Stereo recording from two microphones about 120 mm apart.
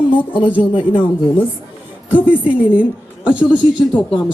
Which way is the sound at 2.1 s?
10° right (ahead or behind).